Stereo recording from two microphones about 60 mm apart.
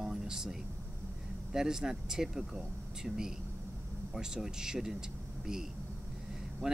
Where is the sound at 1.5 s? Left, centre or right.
Centre.